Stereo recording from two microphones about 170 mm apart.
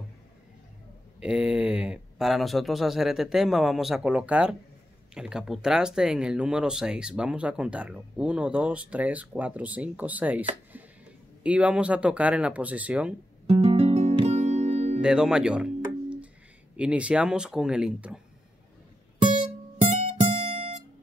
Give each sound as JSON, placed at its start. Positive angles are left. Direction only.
{"t": 1.2, "sound": "speech", "side_deg": -5}
{"t": 11.4, "sound": "speech", "side_deg": -5}
{"t": 13.5, "sound": "music", "side_deg": -35}
{"t": 15.0, "sound": "music", "side_deg": -5}
{"t": 16.7, "sound": "speech", "side_deg": -5}
{"t": 20.2, "sound": "music", "side_deg": -35}